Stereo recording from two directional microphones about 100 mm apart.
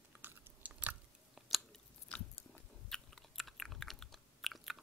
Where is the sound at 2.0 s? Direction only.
10° left (ahead or behind).